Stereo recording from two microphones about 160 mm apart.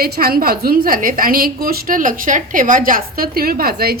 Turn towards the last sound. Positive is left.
turn(degrees=-70)  # may be behind; listen again after turning